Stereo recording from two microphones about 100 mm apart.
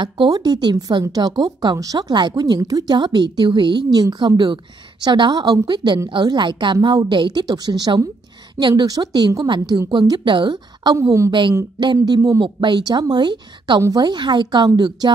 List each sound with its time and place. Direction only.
0.0 s a woman's voice: 50° right (ahead or behind)
11.0 s a woman's voice: 30° right (ahead or behind)
11.8 s a woman's voice: 45° right (ahead or behind)
12.2 s a woman's voice: 35° right (ahead or behind)
12.5 s a woman's voice: 50° right (ahead or behind)